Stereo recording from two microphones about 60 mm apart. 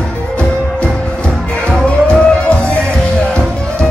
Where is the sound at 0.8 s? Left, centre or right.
Centre.